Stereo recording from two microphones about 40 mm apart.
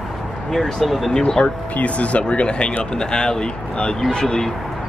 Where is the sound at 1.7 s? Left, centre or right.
Left.